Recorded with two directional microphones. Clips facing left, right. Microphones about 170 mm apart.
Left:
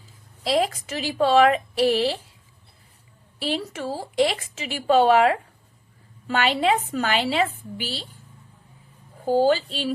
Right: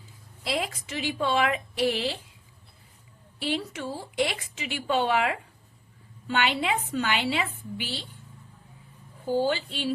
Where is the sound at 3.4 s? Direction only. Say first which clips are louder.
Left 3 dB; 35° left (ahead or behind).